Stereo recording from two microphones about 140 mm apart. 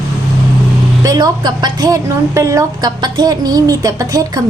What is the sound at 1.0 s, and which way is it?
A woman's voice, 30° right (ahead or behind).